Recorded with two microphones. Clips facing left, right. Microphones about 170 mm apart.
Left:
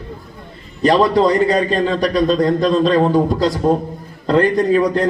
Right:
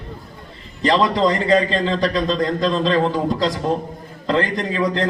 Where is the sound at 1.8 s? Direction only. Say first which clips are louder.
Left 4 dB; 45° left (ahead or behind).